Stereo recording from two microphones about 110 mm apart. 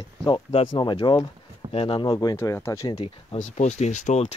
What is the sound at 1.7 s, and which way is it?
Speech, 60° left (ahead or behind).